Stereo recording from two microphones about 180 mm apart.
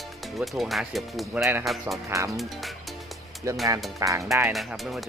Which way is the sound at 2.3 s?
Centre (ahead or behind).